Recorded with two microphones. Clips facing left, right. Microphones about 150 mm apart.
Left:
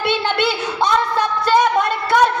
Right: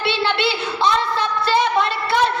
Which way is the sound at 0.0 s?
50° left (ahead or behind).